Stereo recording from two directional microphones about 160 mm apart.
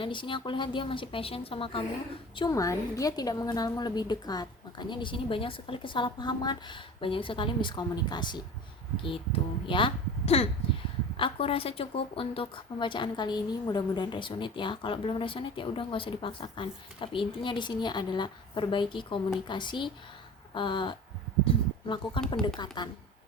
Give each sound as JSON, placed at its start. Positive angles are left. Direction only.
{"t": 0.0, "sound": "a woman's voice", "side_deg": 30}